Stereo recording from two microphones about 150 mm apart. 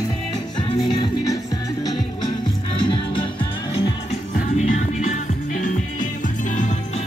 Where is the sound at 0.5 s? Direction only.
30° left (ahead or behind).